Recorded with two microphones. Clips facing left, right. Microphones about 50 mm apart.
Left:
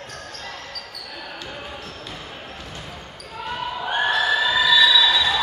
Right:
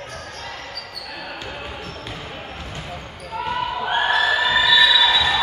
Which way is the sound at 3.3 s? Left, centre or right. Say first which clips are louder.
Right 5 dB; right.